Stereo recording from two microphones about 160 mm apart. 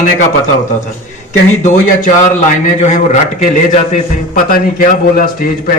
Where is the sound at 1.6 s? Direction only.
50° left (ahead or behind).